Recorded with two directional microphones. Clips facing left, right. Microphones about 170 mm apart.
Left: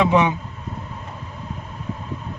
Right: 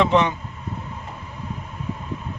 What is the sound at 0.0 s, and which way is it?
Speech, 10° left (ahead or behind).